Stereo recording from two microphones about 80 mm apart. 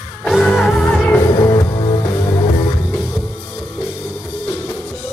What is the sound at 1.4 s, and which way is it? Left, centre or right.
Music, left.